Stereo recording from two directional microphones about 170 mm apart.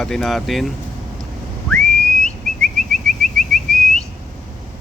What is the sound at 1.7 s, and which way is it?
Whistling, 5° left (ahead or behind).